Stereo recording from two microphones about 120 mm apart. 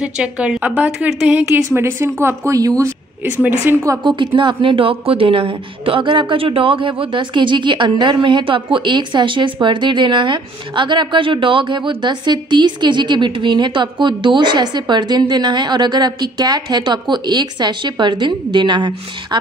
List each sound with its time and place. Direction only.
0.0 s a woman's voice: 10° right (ahead or behind); by 2.9 s 30° right (ahead or behind)
3.3 s a woman's voice: 15° right (ahead or behind)
4.0 s speech: 45° right (ahead or behind)